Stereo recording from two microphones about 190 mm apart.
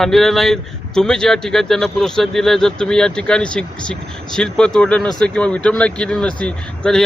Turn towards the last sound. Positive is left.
turn(degrees=5)  # may be behind; listen again after turning